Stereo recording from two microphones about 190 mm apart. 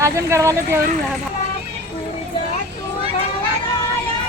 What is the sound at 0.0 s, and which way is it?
Speech, 15° right (ahead or behind).